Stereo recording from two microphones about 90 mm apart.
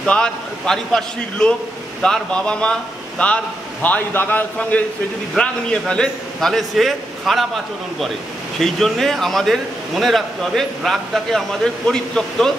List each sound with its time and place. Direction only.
0.0 s speech: 10° left (ahead or behind)